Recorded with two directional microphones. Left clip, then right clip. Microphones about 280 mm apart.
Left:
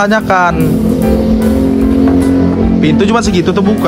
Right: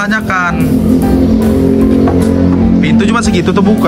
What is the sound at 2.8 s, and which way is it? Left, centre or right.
Speech, centre.